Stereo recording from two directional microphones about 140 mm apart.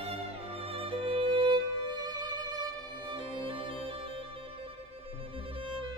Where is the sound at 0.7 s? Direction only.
40° right (ahead or behind).